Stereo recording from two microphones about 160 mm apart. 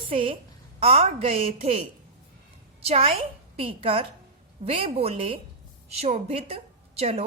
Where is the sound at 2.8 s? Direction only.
40° right (ahead or behind).